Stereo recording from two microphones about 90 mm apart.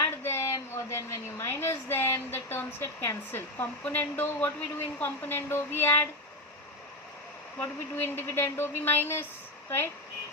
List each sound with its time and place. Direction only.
0.0 s a sound: 30° left (ahead or behind)
3.8 s a woman's voice: 20° left (ahead or behind)
7.6 s a woman's voice: 25° left (ahead or behind)